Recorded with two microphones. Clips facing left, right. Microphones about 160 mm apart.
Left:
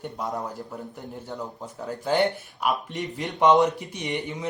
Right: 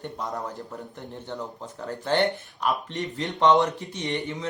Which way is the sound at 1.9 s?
Centre (ahead or behind).